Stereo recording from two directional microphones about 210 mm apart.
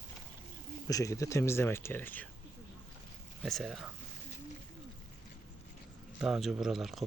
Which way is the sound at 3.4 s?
Centre (ahead or behind).